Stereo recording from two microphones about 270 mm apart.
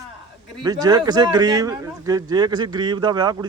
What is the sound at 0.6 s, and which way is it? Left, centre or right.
Speech, centre.